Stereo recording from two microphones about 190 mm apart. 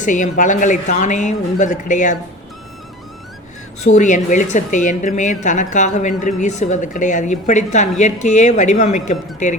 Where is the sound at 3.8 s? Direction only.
40° left (ahead or behind).